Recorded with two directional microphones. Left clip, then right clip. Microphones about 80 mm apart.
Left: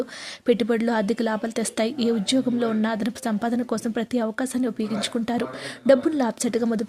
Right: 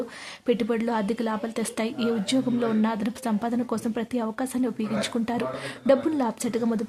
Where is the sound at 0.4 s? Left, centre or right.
Left.